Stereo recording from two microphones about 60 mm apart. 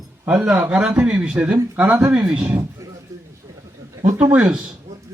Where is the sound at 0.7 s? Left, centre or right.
Right.